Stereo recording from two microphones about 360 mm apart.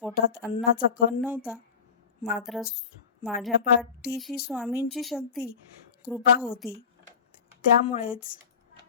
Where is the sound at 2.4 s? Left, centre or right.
Centre.